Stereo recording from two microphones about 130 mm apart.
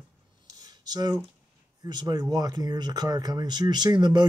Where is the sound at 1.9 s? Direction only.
30° right (ahead or behind).